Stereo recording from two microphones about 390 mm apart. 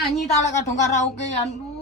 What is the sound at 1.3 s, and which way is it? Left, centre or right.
Speech, centre.